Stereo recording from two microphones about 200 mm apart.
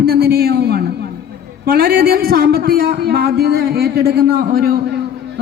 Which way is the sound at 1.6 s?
50° right (ahead or behind).